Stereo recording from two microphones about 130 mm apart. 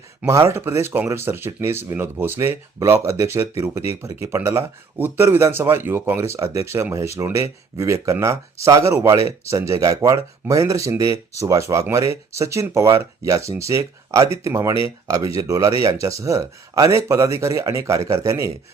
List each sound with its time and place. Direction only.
0.3 s speech: 20° right (ahead or behind)